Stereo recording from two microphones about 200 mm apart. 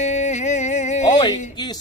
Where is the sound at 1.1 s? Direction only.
20° left (ahead or behind).